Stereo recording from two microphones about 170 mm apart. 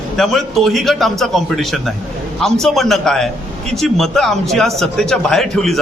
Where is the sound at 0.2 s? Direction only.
Centre (ahead or behind).